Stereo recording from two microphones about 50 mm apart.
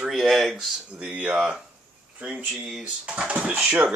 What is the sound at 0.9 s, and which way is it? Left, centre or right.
Speech, right.